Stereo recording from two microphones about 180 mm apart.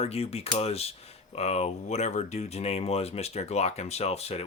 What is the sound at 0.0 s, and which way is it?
Speech, 35° left (ahead or behind).